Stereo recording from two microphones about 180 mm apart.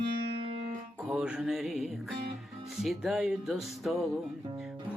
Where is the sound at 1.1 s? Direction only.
5° right (ahead or behind).